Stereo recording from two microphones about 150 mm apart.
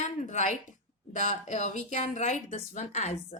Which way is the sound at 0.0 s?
50° left (ahead or behind).